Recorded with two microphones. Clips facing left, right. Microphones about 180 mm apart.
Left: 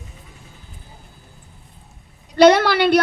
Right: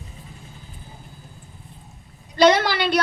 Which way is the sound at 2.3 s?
60° left (ahead or behind).